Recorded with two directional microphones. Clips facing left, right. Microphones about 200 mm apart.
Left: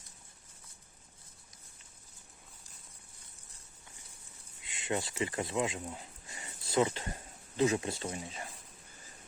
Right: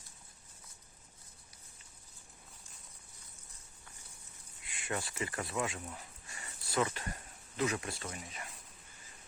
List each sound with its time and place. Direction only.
4.6 s speech: 20° left (ahead or behind)